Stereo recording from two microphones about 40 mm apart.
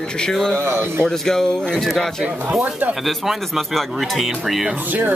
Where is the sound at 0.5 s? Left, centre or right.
Right.